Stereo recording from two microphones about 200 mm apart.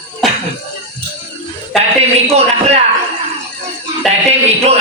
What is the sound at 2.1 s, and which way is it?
Speech, 30° right (ahead or behind).